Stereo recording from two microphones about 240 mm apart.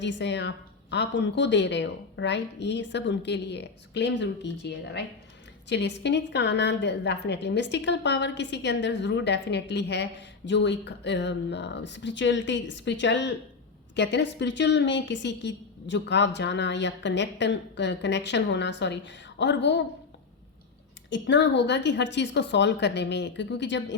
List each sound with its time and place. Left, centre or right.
0.0 s a woman's voice: left
21.1 s a woman's voice: left